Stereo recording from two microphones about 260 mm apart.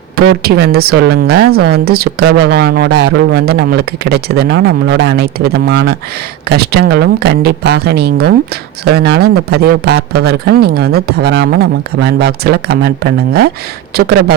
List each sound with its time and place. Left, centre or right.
0.3 s speech: right